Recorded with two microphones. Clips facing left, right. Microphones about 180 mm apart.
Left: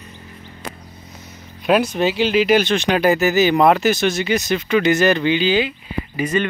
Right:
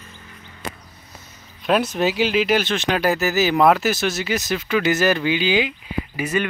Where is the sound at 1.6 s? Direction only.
Centre (ahead or behind).